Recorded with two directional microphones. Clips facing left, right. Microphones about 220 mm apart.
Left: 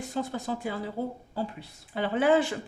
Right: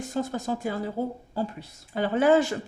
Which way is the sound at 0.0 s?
45° right (ahead or behind).